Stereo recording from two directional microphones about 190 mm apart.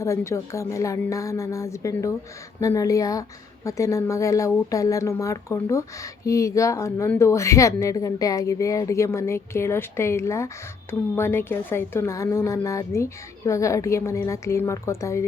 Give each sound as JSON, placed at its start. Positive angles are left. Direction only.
{"t": 0.0, "sound": "a woman's voice", "side_deg": 15}